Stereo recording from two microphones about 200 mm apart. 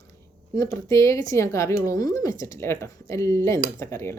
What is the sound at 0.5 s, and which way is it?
Speech, 15° left (ahead or behind).